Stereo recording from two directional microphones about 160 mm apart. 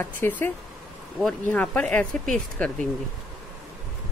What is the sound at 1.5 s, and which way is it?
A woman's voice, 10° left (ahead or behind).